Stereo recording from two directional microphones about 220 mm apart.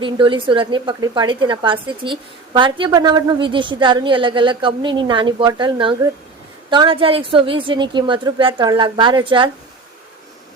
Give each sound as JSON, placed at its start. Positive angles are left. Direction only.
{"t": 0.0, "sound": "a woman's voice", "side_deg": -25}